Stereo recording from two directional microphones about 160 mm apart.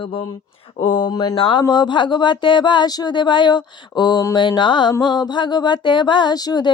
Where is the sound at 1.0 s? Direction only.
25° left (ahead or behind).